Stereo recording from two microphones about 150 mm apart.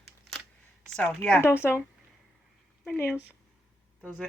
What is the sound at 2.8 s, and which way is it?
Speech, 10° left (ahead or behind).